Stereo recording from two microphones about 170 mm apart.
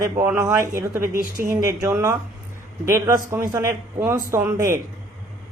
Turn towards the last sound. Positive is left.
turn(degrees=-15)  # may be behind; listen again after turning